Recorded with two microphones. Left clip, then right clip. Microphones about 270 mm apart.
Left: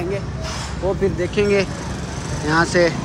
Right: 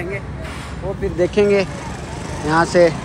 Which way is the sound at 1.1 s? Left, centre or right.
Centre.